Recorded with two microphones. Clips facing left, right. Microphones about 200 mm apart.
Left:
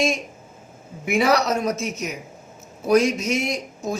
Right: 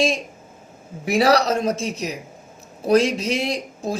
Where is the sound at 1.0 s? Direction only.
35° right (ahead or behind).